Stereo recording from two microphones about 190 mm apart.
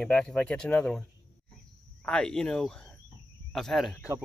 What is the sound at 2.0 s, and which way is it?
Speech, 5° left (ahead or behind).